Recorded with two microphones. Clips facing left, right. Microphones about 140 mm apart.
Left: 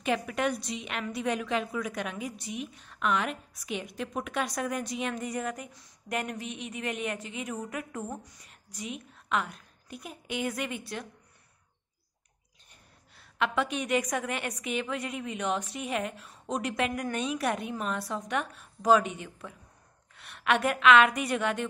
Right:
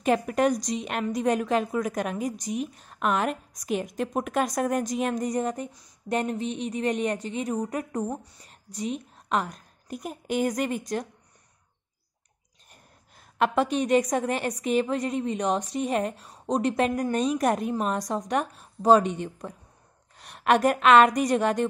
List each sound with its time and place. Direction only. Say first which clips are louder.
0.0 s a woman's voice: right 6 dB; 40° right (ahead or behind)
13.1 s a woman's voice: right 5 dB; 45° right (ahead or behind)